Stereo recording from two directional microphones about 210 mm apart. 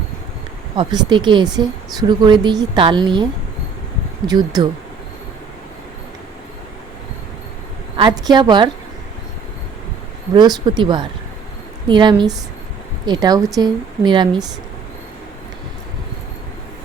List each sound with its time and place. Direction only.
0.8 s a woman's voice: 20° right (ahead or behind)
4.3 s a woman's voice: 20° right (ahead or behind)
7.9 s a woman's voice: 20° right (ahead or behind)
10.3 s a woman's voice: 20° right (ahead or behind)